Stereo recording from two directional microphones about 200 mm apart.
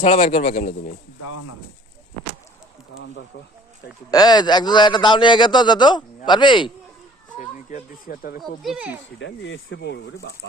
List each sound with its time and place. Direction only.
0.0 s speech: 40° left (ahead or behind)
0.5 s speech: 50° left (ahead or behind)
2.9 s speech: 70° left (ahead or behind)
4.1 s a man's voice: 20° left (ahead or behind)
7.3 s speech: 45° left (ahead or behind)
8.4 s speech: centre (ahead or behind)
9.1 s speech: 65° left (ahead or behind)